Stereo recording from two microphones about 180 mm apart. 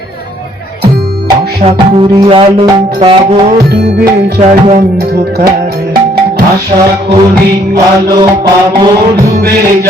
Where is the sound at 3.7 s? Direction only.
60° right (ahead or behind).